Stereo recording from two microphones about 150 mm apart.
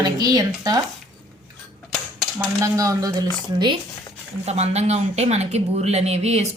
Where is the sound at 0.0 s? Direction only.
25° right (ahead or behind).